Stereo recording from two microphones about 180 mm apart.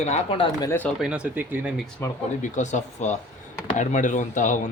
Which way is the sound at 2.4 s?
45° left (ahead or behind).